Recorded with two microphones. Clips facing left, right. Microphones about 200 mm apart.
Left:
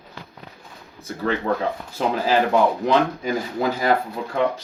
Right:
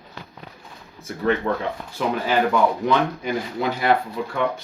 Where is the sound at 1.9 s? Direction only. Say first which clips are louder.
Left 2 dB; 35° left (ahead or behind).